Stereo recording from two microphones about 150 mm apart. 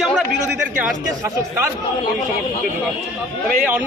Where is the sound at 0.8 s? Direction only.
15° right (ahead or behind).